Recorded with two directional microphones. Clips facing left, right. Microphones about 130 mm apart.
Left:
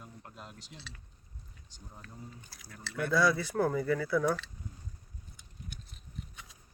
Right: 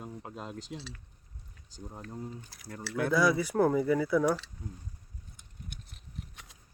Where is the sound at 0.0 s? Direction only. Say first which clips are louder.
Right 8 dB; 90° right.